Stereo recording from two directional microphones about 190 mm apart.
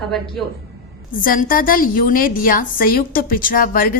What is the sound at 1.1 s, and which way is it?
A woman's voice, 45° left (ahead or behind).